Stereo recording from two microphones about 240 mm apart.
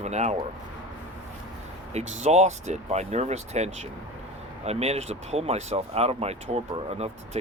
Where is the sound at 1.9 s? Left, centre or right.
Right.